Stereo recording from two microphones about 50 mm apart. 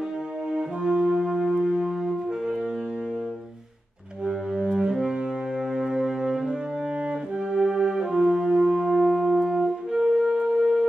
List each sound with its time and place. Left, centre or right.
0.6 s brass instrument: centre
1.4 s music: centre
4.6 s brass instrument: centre
5.8 s music: centre
7.5 s french horn: centre
9.5 s music: centre